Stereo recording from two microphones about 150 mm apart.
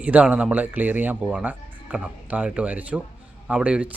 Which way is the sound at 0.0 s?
10° right (ahead or behind).